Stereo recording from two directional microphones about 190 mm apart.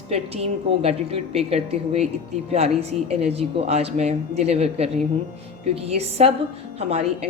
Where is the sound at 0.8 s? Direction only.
30° right (ahead or behind).